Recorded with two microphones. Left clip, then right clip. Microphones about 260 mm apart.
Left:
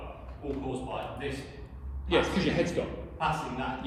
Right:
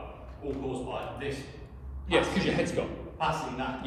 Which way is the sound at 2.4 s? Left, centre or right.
Right.